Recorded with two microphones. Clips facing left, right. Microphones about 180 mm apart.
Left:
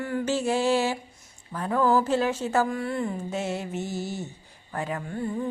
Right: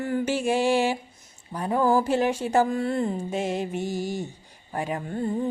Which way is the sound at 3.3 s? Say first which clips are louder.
Right 3 dB; 15° right (ahead or behind).